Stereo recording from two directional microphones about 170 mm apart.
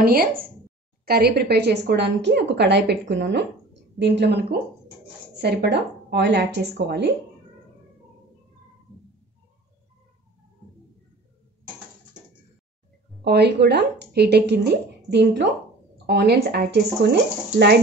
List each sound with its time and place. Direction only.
0.0 s a woman's voice: 65° right (ahead or behind); by 7.1 s 85° right
13.2 s a woman's voice: 75° right (ahead or behind); by 15.4 s 90° right
16.1 s a woman's voice: 80° right